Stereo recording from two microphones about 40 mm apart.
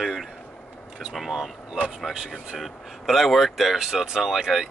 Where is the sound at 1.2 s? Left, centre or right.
Centre.